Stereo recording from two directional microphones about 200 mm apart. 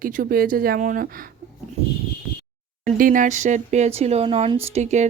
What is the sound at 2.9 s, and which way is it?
Speech, 45° right (ahead or behind).